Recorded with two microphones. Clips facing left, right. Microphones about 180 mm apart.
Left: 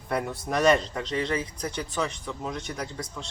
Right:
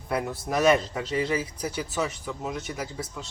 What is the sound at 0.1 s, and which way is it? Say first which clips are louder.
A man's voice: even; centre (ahead or behind).